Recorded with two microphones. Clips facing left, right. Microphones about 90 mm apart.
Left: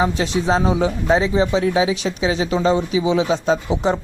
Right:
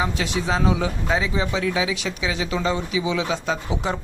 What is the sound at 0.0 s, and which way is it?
Speech, 30° left (ahead or behind).